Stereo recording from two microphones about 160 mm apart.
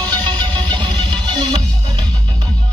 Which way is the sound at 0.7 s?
30° right (ahead or behind).